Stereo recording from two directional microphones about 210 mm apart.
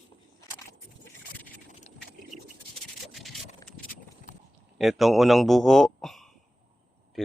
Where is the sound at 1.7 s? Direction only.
35° left (ahead or behind).